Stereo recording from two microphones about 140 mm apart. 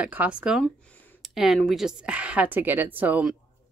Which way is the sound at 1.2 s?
Centre (ahead or behind).